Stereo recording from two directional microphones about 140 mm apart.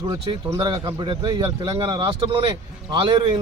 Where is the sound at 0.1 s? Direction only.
30° right (ahead or behind).